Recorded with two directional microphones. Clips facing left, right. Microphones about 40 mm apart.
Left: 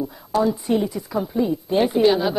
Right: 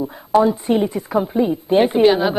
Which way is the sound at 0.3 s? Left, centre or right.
Right.